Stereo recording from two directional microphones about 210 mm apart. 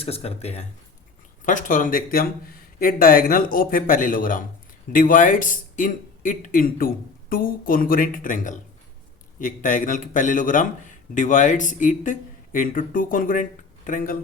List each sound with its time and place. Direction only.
0.0 s a man's voice: 30° left (ahead or behind)